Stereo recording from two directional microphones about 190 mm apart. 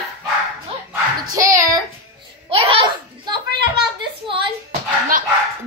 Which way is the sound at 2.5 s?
25° right (ahead or behind).